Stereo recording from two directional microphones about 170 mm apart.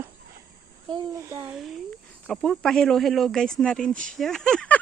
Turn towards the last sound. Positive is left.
turn(degrees=5)  # may be behind; listen again after turning